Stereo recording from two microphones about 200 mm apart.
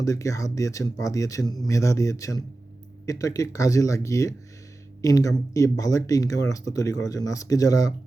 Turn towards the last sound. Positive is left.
turn(degrees=15)  # may be behind; listen again after turning